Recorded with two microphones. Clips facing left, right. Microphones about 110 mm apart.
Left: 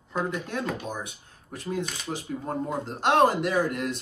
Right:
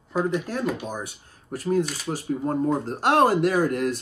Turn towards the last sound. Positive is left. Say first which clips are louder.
# right 4 dB
turn(degrees=-45)  # may be behind; listen again after turning